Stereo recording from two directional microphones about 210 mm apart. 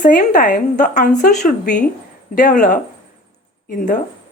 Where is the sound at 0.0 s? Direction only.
40° left (ahead or behind).